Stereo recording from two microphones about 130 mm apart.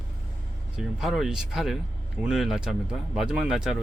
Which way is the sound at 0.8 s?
5° right (ahead or behind).